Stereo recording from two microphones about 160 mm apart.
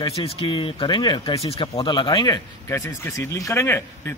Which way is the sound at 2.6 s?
15° left (ahead or behind).